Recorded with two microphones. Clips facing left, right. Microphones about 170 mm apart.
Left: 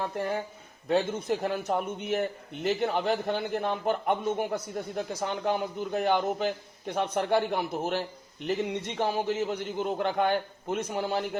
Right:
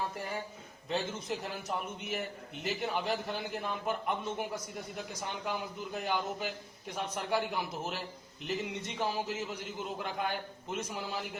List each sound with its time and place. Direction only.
0.9 s a man's voice: 55° left (ahead or behind)